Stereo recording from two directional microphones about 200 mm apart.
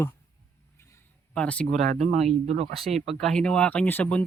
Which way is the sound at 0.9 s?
5° left (ahead or behind).